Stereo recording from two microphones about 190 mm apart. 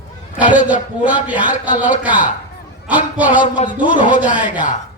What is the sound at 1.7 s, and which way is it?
Speech, 40° left (ahead or behind).